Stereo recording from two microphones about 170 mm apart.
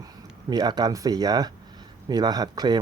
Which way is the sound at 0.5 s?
25° right (ahead or behind).